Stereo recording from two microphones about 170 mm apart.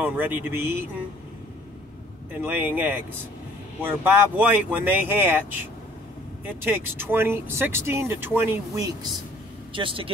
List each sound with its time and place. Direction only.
0.0 s speech: 10° right (ahead or behind)
2.4 s speech: 10° right (ahead or behind)
9.8 s speech: 30° right (ahead or behind)